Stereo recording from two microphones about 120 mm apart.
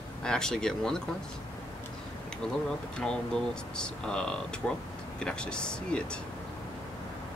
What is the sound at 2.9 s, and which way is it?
Speech, 10° left (ahead or behind).